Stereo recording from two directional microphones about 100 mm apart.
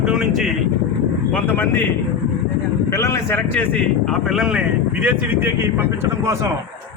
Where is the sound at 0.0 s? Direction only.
5° right (ahead or behind).